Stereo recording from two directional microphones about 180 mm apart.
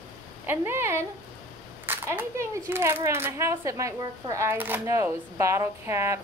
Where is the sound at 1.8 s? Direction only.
10° right (ahead or behind).